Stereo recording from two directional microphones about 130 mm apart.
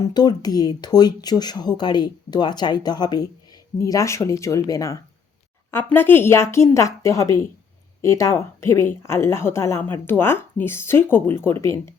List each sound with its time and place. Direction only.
0.0 s speech: 30° left (ahead or behind)